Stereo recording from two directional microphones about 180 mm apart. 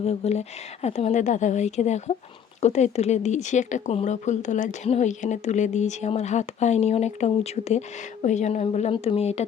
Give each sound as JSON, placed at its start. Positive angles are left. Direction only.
{"t": 0.0, "sound": "speech", "side_deg": 35}